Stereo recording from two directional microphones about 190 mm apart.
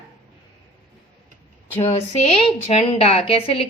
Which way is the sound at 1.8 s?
35° left (ahead or behind).